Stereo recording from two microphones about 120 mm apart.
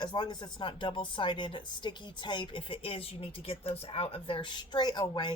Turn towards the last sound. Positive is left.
turn(degrees=35)  # may be behind; listen again after turning